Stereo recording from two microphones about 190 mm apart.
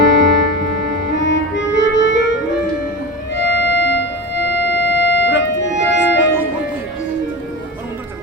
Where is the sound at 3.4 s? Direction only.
60° left (ahead or behind).